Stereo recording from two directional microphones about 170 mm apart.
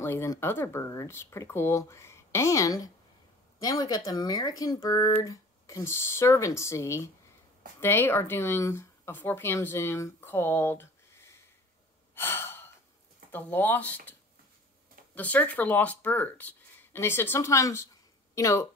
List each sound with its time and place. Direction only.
0.0 s speech: 15° left (ahead or behind)
12.2 s gasp: 15° left (ahead or behind)
13.3 s speech: 10° left (ahead or behind)
15.1 s speech: 10° left (ahead or behind)